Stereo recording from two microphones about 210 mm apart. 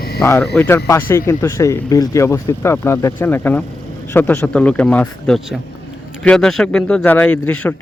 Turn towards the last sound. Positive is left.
turn(degrees=5)  # may be behind; listen again after turning